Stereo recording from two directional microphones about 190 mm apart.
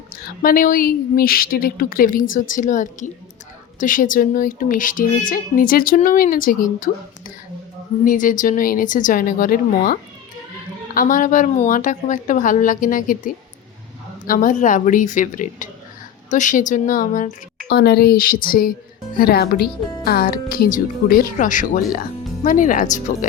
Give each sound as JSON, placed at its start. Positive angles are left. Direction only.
{"t": 0.4, "sound": "speech", "side_deg": 45}
{"t": 17.7, "sound": "speech", "side_deg": 60}